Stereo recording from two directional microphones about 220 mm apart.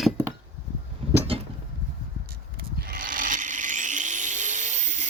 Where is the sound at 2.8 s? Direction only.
40° right (ahead or behind).